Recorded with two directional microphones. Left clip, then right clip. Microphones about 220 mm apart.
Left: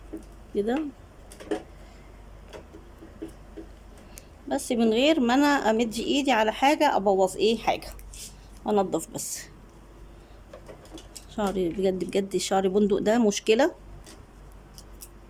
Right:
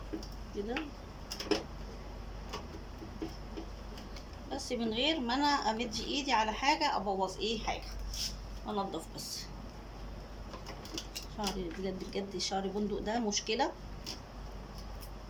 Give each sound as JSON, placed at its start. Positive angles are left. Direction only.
{"t": 4.4, "sound": "a woman's voice", "side_deg": 50}
{"t": 8.6, "sound": "a woman's voice", "side_deg": 40}
{"t": 11.3, "sound": "speech", "side_deg": 55}